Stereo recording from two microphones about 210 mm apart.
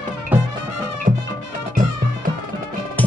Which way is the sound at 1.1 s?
35° right (ahead or behind).